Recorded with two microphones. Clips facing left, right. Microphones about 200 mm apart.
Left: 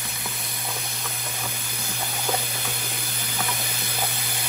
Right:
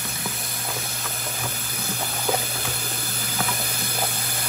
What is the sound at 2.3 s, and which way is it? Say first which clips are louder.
Water: right 3 dB; 5° right (ahead or behind).